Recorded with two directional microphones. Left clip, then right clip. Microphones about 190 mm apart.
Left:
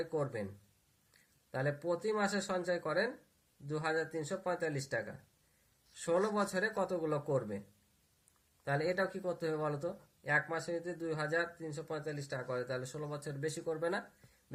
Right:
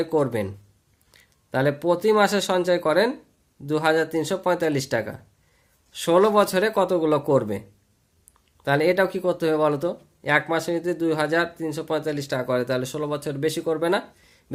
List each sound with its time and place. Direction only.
0.0 s speech: 50° right (ahead or behind)
8.6 s speech: 40° right (ahead or behind)